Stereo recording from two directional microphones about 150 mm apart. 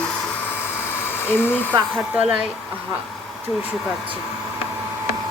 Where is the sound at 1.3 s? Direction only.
15° left (ahead or behind).